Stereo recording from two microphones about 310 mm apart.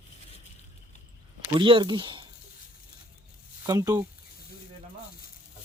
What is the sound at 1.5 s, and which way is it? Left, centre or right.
Speech, centre.